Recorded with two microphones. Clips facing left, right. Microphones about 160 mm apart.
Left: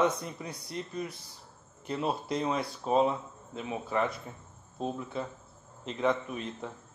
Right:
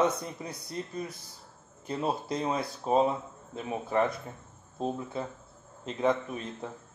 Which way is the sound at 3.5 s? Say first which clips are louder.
Right 2 dB; 35° right (ahead or behind).